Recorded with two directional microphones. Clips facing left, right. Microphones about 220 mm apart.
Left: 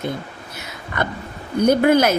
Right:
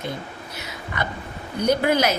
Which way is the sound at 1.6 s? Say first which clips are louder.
Left 5 dB; 50° left (ahead or behind).